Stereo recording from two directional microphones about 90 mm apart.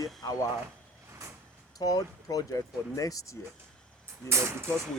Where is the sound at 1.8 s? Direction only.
45° left (ahead or behind).